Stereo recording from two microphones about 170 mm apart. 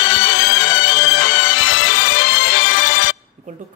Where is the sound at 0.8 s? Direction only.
90° left.